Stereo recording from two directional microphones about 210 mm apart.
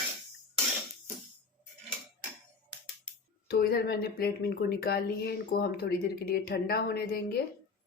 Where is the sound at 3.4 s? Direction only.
45° left (ahead or behind).